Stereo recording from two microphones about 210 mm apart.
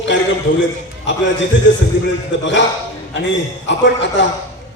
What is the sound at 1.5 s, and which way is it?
A man's voice, 60° left (ahead or behind).